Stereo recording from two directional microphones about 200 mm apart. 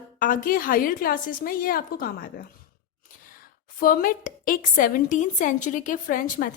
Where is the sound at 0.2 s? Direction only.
45° left (ahead or behind).